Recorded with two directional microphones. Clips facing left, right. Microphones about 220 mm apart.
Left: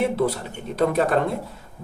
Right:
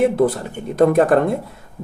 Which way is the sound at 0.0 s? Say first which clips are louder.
Right 6 dB; 50° right (ahead or behind).